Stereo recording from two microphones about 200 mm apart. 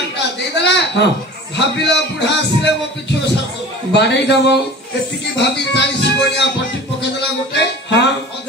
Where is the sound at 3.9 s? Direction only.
60° left (ahead or behind).